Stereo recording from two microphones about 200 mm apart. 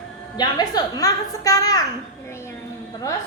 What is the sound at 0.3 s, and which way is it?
A child's voice, 20° left (ahead or behind).